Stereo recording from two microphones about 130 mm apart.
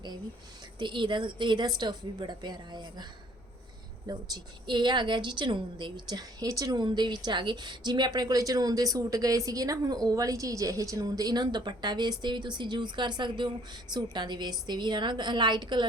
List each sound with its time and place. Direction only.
0.8 s a woman's voice: 35° right (ahead or behind)